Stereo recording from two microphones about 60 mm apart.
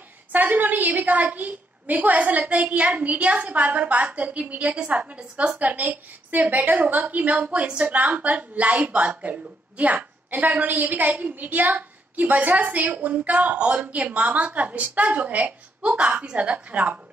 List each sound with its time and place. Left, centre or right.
0.3 s a woman's voice: right